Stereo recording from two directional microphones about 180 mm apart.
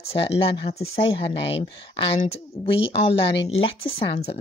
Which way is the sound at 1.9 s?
35° left (ahead or behind).